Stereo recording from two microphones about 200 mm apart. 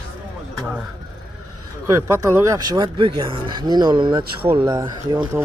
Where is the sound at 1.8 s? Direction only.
15° right (ahead or behind).